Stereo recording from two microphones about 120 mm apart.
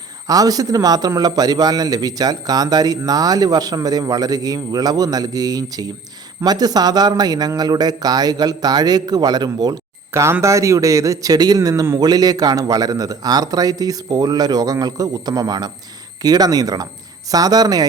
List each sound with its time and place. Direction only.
0.3 s a man's voice: 30° right (ahead or behind)
10.1 s a man's voice: 20° right (ahead or behind)